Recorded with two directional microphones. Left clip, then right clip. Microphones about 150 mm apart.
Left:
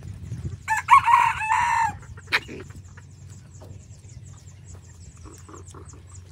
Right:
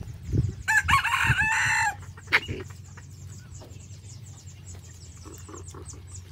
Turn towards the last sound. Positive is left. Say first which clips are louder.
# right 1 dB
turn(degrees=15)  # may be behind; listen again after turning